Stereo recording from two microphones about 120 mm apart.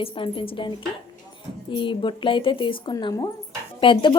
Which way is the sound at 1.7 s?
45° left (ahead or behind).